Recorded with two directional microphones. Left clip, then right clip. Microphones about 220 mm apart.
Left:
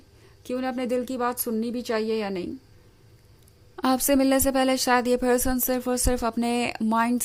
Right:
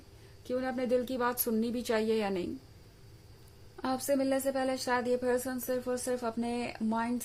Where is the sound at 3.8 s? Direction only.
40° left (ahead or behind).